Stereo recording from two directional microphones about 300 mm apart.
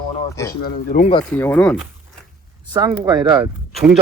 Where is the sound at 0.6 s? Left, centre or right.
Left.